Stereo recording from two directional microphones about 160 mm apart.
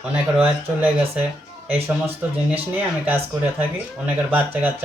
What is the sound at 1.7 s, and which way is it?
Speech, 40° right (ahead or behind).